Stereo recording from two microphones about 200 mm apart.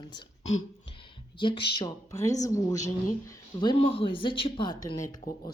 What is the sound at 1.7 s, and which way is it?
Speech, 15° left (ahead or behind).